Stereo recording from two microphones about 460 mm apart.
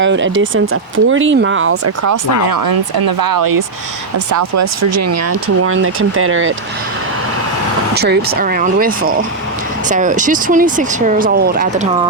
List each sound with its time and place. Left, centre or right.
0.0 s speech: right
2.5 s speech: right
7.9 s speech: right